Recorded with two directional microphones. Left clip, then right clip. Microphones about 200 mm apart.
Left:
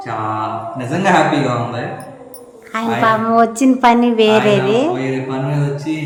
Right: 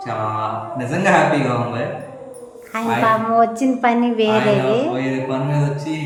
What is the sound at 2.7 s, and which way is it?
A woman's voice, 10° left (ahead or behind).